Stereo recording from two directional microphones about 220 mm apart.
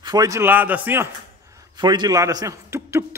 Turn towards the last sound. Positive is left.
turn(degrees=-10)  # may be behind; listen again after turning